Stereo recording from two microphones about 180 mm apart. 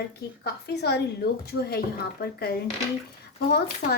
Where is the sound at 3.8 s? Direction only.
45° left (ahead or behind).